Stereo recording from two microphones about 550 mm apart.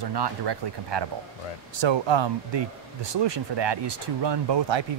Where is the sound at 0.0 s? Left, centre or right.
Right.